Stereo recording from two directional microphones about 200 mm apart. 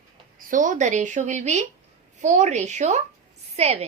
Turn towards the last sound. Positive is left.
turn(degrees=-30)  # may be behind; listen again after turning